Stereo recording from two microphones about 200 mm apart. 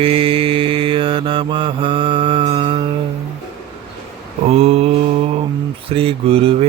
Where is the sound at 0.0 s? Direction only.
30° right (ahead or behind).